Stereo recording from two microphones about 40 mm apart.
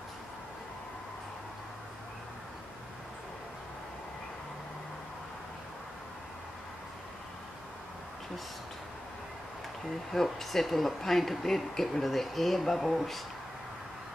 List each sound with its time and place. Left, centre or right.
10.1 s speech: centre